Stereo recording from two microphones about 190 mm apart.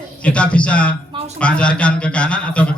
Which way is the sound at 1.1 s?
30° right (ahead or behind).